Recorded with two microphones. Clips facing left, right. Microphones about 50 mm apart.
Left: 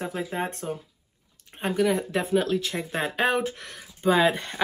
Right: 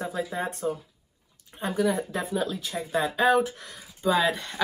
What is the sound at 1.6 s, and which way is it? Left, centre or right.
Speech, left.